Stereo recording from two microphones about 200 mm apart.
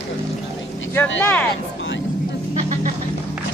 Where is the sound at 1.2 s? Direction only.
10° left (ahead or behind).